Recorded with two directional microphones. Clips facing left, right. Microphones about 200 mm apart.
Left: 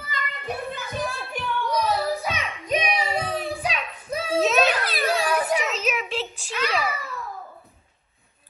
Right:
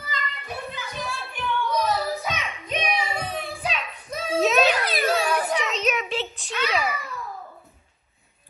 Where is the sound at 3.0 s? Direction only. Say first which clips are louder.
Left 3 dB; 35° left (ahead or behind).